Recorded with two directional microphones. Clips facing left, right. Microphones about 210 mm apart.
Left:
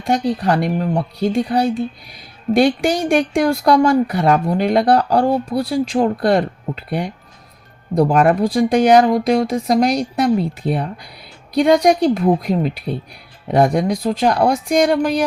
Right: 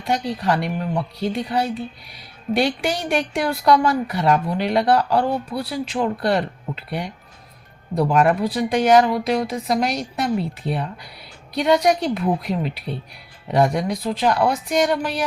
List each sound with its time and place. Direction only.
0.0 s speech: 45° left (ahead or behind)